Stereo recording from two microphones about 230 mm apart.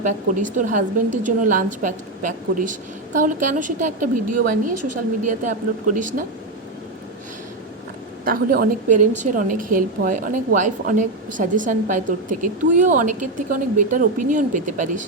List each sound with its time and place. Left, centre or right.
0.0 s a woman's voice: right
8.2 s a woman's voice: right